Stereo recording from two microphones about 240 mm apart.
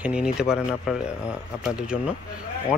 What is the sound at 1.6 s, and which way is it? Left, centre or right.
Speech, centre.